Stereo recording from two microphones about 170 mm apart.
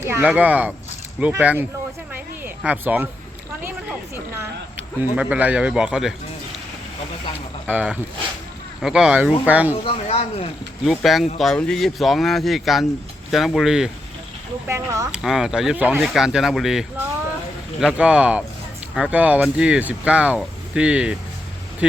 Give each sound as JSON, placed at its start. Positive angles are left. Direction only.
{"t": 0.0, "sound": "speech", "side_deg": -15}
{"t": 2.1, "sound": "a sound", "side_deg": -10}
{"t": 5.1, "sound": "speech", "side_deg": -10}
{"t": 7.7, "sound": "speech", "side_deg": -10}
{"t": 9.8, "sound": "speech", "side_deg": 35}
{"t": 10.8, "sound": "speech", "side_deg": 0}
{"t": 14.7, "sound": "speech", "side_deg": -20}
{"t": 15.1, "sound": "speech", "side_deg": 0}